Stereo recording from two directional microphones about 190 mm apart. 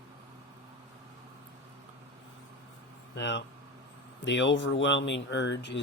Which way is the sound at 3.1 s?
70° left (ahead or behind).